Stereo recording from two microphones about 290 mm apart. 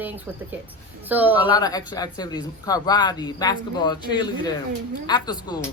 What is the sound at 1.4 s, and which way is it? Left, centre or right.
Speech, centre.